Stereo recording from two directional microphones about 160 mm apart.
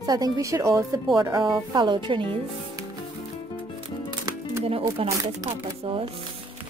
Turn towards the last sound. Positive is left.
turn(degrees=-35)  # may be behind; listen again after turning